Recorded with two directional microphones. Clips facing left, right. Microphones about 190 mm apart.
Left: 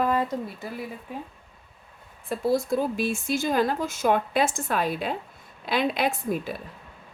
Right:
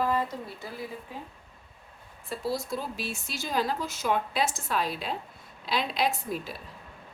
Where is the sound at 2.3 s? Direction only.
50° left (ahead or behind).